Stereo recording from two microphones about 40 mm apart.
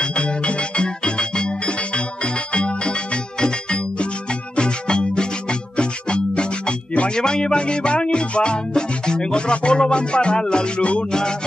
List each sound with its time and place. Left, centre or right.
0.0 s music: left
11.1 s music: centre